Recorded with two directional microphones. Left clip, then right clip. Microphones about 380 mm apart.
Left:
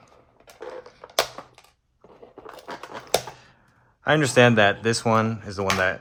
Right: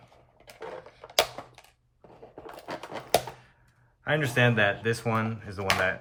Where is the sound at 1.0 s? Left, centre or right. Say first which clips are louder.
Left 2 dB; centre.